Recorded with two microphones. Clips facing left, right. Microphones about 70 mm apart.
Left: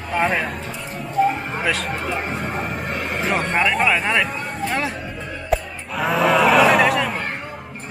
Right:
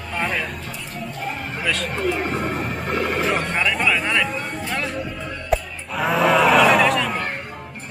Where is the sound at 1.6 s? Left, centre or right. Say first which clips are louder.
Left 1 dB; centre.